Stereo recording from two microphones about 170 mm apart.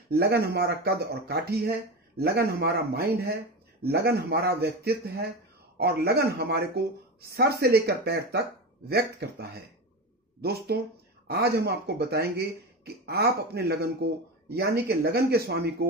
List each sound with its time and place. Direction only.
0.1 s speech: 70° right (ahead or behind)